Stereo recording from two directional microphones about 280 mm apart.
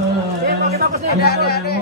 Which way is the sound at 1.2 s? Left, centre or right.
Left.